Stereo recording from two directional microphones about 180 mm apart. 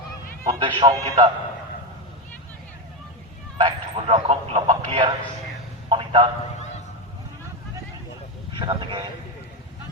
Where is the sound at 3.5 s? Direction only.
30° right (ahead or behind).